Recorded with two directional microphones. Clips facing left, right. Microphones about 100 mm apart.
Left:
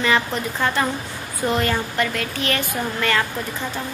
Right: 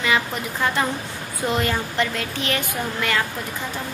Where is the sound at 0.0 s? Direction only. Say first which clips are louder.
Left 2 dB; 10° right (ahead or behind).